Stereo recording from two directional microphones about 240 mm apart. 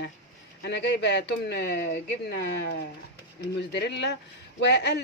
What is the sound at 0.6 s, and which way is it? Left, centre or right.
A man's voice, left.